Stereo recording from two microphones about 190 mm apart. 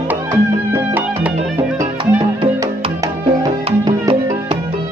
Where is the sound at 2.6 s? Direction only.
15° right (ahead or behind).